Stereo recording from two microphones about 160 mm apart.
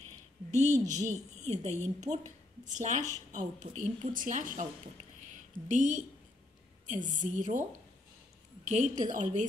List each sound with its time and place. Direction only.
0.5 s a sound: 45° right (ahead or behind)
0.8 s a woman's voice: 50° right (ahead or behind)
5.7 s a woman's voice: 50° right (ahead or behind)
8.6 s a woman's voice: 50° right (ahead or behind)